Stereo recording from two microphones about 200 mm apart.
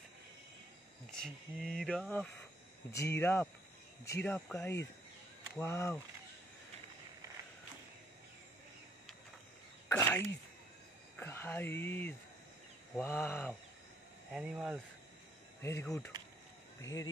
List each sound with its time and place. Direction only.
1.1 s speech: 5° left (ahead or behind)
9.8 s a sound: 15° left (ahead or behind)
11.1 s speech: 10° left (ahead or behind)
14.3 s speech: 5° right (ahead or behind)
15.6 s speech: 15° left (ahead or behind)